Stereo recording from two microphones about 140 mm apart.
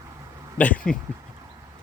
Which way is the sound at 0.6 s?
10° left (ahead or behind).